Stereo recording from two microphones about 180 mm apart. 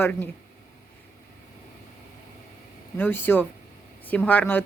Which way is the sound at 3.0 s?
10° left (ahead or behind).